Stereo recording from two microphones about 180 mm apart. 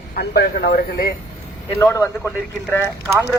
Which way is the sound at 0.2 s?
65° left (ahead or behind).